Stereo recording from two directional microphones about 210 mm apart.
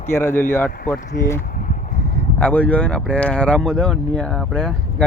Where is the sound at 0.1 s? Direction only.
10° left (ahead or behind).